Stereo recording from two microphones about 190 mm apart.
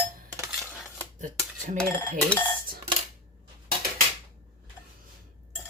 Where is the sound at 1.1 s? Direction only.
40° right (ahead or behind).